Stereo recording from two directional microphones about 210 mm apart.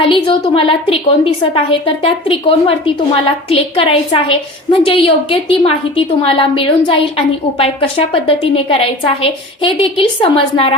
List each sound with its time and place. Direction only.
0.0 s a woman's voice: 25° left (ahead or behind)